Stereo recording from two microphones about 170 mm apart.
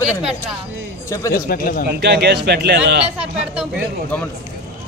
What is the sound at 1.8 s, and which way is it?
A man's voice, 70° right (ahead or behind).